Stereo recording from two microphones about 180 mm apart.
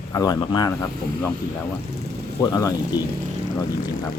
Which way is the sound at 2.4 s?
20° left (ahead or behind).